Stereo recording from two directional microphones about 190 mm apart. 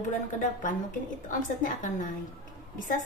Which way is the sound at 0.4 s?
40° left (ahead or behind).